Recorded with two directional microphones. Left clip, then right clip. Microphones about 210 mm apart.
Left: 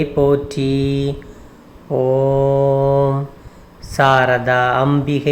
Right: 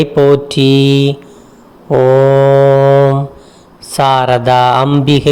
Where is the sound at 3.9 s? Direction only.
20° right (ahead or behind).